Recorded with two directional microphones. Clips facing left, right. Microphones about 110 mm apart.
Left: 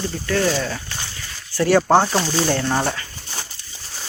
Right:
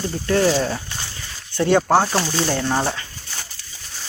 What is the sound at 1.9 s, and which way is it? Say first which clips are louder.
Speech: left 1 dB; centre (ahead or behind).